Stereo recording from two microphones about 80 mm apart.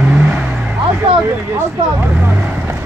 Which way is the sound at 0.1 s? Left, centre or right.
Centre.